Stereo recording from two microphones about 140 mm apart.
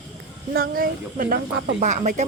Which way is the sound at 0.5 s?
90° right.